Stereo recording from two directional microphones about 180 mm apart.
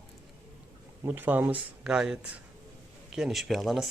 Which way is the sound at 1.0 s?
10° right (ahead or behind).